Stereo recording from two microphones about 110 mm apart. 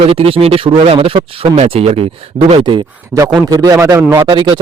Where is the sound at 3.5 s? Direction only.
30° right (ahead or behind).